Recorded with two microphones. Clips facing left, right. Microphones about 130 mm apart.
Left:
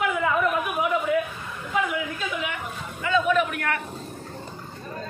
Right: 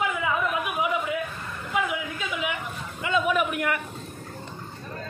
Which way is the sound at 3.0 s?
15° right (ahead or behind).